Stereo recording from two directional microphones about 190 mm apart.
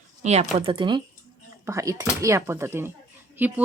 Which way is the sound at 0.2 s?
35° right (ahead or behind).